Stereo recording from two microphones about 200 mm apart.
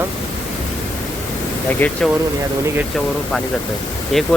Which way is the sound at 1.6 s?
10° left (ahead or behind).